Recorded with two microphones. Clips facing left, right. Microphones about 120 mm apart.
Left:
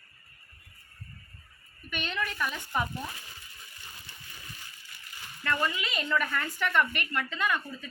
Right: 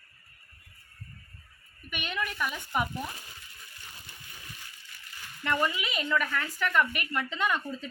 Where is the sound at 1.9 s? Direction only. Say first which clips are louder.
Even; 10° right (ahead or behind).